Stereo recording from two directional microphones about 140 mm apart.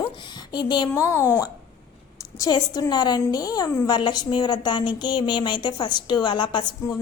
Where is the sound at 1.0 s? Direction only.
20° left (ahead or behind).